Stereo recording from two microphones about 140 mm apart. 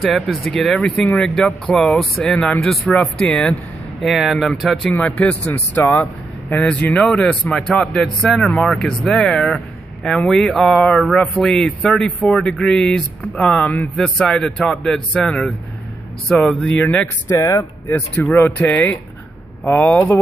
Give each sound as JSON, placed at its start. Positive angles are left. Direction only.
{"t": 0.0, "sound": "speech", "side_deg": 0}
{"t": 4.9, "sound": "speech", "side_deg": 10}